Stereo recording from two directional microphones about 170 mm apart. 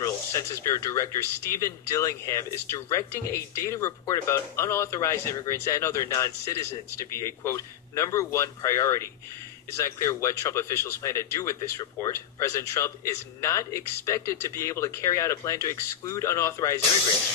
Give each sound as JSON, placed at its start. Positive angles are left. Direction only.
{"t": 0.0, "sound": "speech", "side_deg": 15}